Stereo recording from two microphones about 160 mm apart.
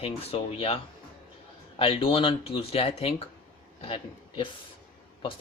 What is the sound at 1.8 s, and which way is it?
A man's voice, 35° left (ahead or behind).